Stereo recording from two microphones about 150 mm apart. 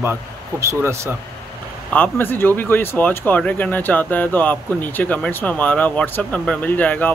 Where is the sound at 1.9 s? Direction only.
10° left (ahead or behind).